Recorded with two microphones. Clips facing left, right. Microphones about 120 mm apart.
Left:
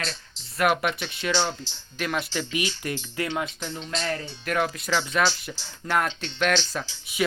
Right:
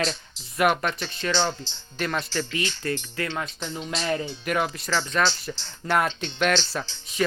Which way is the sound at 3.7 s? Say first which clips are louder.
Right 4 dB; 5° right (ahead or behind).